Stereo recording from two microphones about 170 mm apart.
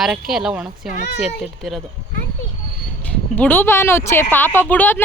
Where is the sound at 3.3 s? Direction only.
10° left (ahead or behind).